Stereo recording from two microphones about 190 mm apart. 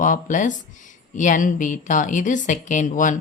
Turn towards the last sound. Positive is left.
turn(degrees=40)  # may be behind; listen again after turning